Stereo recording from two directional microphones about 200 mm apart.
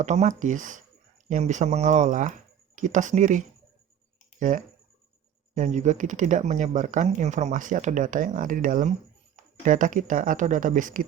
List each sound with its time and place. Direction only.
0.0 s speech: 35° right (ahead or behind)